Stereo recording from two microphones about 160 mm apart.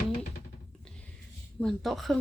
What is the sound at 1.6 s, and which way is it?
Speech, centre (ahead or behind).